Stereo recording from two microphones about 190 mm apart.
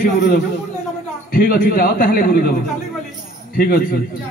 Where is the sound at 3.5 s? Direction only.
50° left (ahead or behind).